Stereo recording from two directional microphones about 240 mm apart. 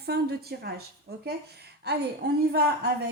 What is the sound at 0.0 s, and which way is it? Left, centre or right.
A woman's voice, right.